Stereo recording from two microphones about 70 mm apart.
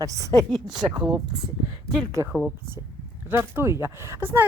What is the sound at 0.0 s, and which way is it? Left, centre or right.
Speech, right.